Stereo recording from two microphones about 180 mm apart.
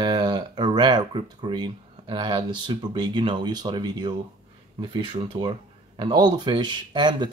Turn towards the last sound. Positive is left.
turn(degrees=-25)  # may be behind; listen again after turning